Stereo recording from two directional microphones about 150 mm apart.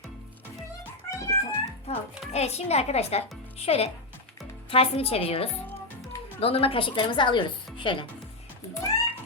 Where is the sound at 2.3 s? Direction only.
45° left (ahead or behind).